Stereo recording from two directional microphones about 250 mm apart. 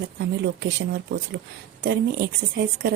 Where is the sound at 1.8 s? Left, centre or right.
Right.